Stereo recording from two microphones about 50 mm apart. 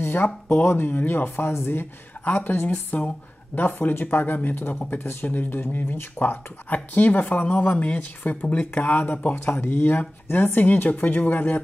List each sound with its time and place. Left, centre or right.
0.0 s speech: left
9.3 s speech: left